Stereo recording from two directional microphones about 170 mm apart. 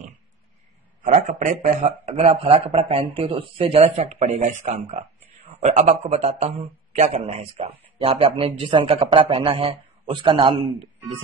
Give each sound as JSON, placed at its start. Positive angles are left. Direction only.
{"t": 1.0, "sound": "a man's voice", "side_deg": -45}